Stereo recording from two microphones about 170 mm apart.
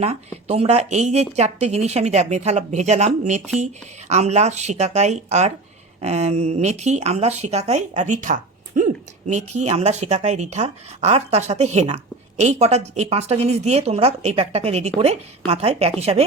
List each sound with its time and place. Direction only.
0.0 s speech: 40° right (ahead or behind)